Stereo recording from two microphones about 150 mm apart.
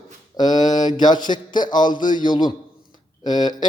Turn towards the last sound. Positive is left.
turn(degrees=30)  # may be behind; listen again after turning